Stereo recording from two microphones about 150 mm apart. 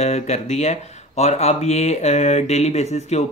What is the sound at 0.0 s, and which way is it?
Speech, 50° left (ahead or behind).